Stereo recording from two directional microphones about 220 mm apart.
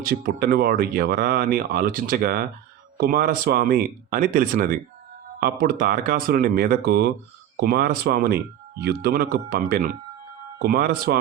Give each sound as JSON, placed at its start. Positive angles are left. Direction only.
{"t": 0.0, "sound": "speech", "side_deg": -40}